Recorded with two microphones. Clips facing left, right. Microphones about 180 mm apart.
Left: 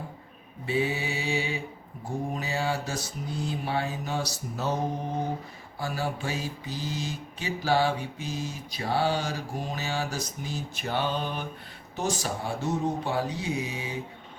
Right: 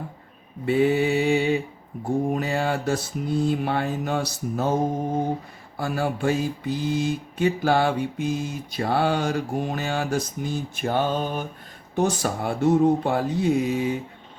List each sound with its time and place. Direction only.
0.6 s mantra: 55° right (ahead or behind)
5.7 s mantra: 55° right (ahead or behind)
11.9 s mantra: 60° right (ahead or behind)